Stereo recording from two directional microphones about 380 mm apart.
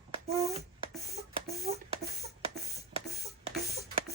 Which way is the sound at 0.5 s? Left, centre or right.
Centre.